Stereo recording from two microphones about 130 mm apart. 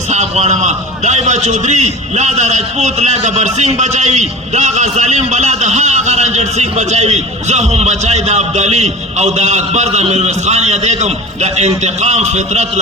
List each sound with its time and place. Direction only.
0.1 s a man's voice: 60° right (ahead or behind)